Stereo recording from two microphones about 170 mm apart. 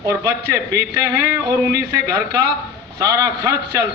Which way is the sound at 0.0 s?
15° right (ahead or behind).